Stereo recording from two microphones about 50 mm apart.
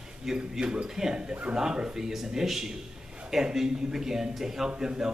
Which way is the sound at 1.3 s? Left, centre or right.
Right.